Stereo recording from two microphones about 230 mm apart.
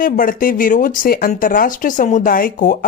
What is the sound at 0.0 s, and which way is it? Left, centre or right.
Speech, left.